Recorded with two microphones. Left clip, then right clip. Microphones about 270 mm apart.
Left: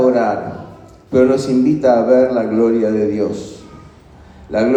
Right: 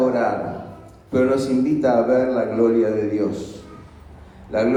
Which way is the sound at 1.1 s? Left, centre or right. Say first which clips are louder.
Left 6 dB; left.